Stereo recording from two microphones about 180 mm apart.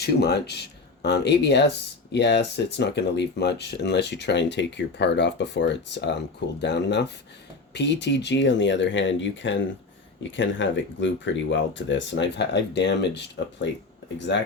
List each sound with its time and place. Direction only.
0.0 s speech: 65° left (ahead or behind)